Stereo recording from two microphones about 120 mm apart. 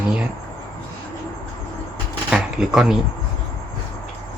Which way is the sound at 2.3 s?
5° right (ahead or behind).